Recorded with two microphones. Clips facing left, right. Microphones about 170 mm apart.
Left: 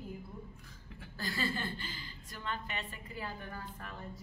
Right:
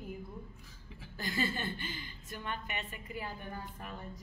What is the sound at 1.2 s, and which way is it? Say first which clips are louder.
A woman's voice: right 1 dB; 20° right (ahead or behind).